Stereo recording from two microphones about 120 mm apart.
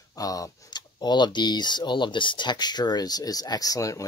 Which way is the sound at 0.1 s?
30° left (ahead or behind).